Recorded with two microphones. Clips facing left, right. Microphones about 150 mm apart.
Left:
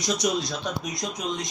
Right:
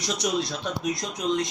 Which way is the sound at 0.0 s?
Centre (ahead or behind).